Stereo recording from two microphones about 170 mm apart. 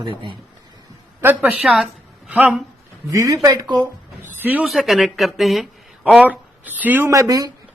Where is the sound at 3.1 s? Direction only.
20° right (ahead or behind).